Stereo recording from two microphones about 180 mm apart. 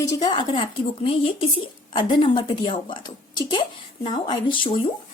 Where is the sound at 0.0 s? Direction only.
20° left (ahead or behind).